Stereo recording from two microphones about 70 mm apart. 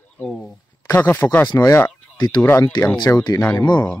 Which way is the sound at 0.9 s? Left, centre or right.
Left.